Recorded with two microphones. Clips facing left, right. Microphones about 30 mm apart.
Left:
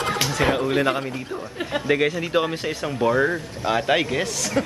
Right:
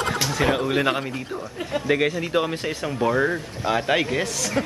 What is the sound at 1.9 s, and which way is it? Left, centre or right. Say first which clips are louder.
Speech: left 1 dB; centre.